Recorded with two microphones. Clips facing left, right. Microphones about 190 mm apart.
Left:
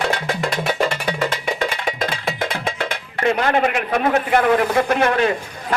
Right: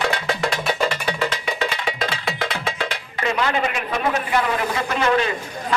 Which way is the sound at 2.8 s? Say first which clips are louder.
Left 2 dB; 55° left (ahead or behind).